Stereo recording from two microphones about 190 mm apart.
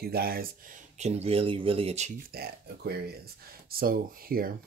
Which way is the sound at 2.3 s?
55° right (ahead or behind).